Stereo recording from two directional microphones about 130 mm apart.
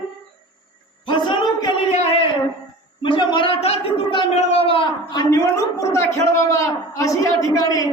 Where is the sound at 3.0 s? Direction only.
40° left (ahead or behind).